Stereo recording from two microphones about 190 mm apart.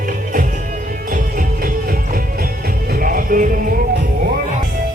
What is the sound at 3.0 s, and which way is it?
Music, 45° right (ahead or behind).